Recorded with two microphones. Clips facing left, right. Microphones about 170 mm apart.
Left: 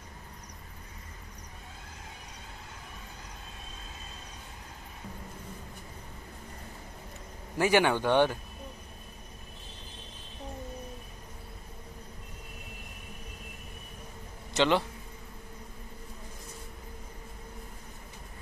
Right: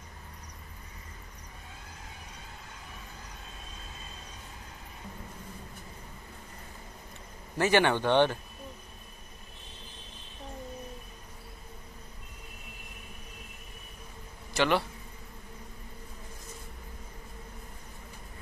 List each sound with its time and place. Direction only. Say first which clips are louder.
7.5 s speech: even; 10° left (ahead or behind)
14.5 s a man's voice: left 1 dB; 20° left (ahead or behind)